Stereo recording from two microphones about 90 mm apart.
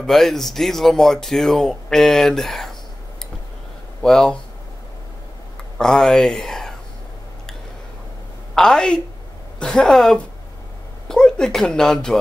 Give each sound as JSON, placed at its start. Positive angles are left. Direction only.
{"t": 0.0, "sound": "speech", "side_deg": 5}
{"t": 4.0, "sound": "a woman's voice", "side_deg": 5}
{"t": 5.8, "sound": "speech", "side_deg": 5}
{"t": 8.5, "sound": "a woman's voice", "side_deg": 5}